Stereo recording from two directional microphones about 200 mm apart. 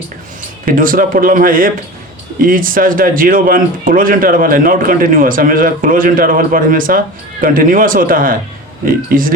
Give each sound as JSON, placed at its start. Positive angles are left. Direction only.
{"t": 0.6, "sound": "speech", "side_deg": -45}